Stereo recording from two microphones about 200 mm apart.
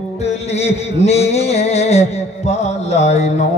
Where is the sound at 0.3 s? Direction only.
35° left (ahead or behind).